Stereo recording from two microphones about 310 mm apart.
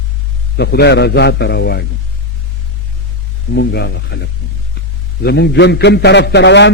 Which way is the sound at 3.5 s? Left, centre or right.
Left.